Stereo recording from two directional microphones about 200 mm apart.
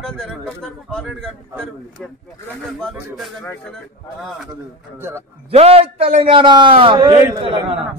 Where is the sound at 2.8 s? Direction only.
5° left (ahead or behind).